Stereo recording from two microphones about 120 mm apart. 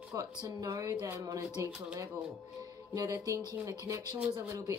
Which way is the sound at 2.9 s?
30° right (ahead or behind).